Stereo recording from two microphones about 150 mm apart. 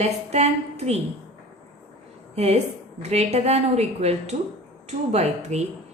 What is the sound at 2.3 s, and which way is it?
A woman's voice, 45° right (ahead or behind).